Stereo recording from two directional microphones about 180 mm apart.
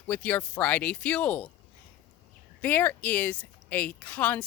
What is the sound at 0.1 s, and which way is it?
A woman's voice, 10° left (ahead or behind).